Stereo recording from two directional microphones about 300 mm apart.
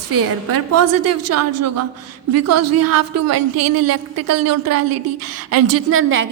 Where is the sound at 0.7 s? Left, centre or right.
Right.